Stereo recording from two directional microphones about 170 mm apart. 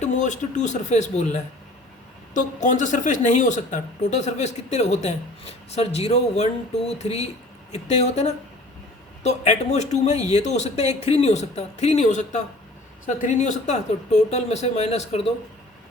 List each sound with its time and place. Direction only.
0.0 s a woman's voice: 45° left (ahead or behind)